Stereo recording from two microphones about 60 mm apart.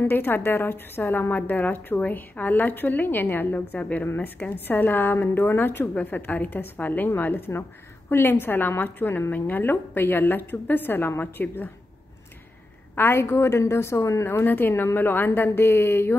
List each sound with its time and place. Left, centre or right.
0.0 s a woman's voice: left
1.3 s a woman's voice: left
12.9 s a woman's voice: left
14.4 s a woman's voice: left